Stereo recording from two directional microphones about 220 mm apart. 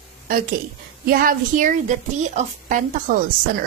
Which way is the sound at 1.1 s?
40° right (ahead or behind).